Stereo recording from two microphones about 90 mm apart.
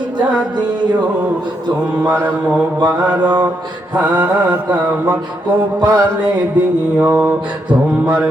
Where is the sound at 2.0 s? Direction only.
25° right (ahead or behind).